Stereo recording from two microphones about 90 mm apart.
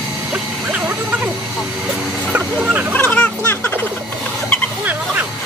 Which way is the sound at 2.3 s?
15° right (ahead or behind).